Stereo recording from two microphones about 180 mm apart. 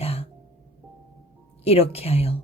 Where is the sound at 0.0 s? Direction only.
35° left (ahead or behind).